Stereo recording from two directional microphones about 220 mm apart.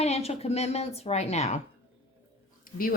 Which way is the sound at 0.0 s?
30° left (ahead or behind).